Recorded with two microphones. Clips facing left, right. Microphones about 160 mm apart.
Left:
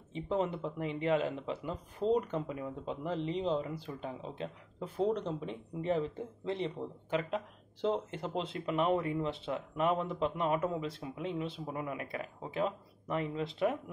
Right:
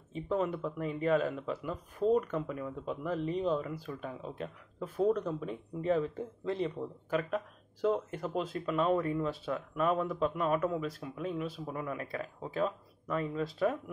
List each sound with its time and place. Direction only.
0.1 s speech: 25° left (ahead or behind)